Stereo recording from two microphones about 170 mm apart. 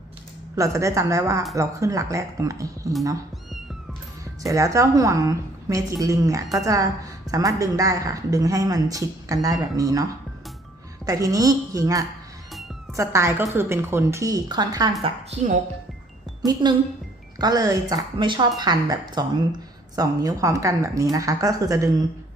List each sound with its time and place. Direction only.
0.5 s a woman's voice: 20° right (ahead or behind)
4.4 s a woman's voice: 20° right (ahead or behind)
12.5 s cat: centre (ahead or behind)
12.9 s a woman's voice: 15° right (ahead or behind)
15.0 s a woman's voice: 40° right (ahead or behind)
16.6 s a woman's voice: 25° right (ahead or behind)